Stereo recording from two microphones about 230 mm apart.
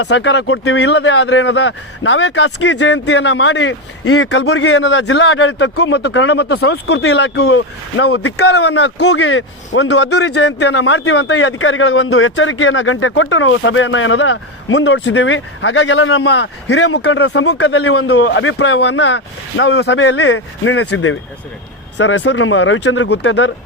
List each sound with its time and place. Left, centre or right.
0.0 s speech: left
8.4 s speech: left
18.1 s speech: left